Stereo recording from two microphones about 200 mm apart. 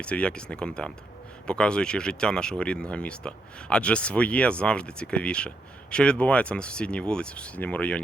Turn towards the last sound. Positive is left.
turn(degrees=5)  # may be behind; listen again after turning